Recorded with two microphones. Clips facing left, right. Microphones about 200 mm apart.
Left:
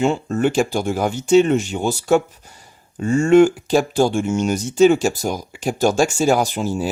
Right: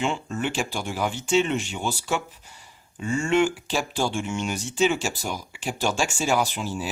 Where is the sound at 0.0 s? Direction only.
40° left (ahead or behind).